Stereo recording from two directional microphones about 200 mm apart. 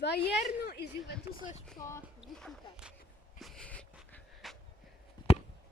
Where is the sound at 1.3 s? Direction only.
20° right (ahead or behind).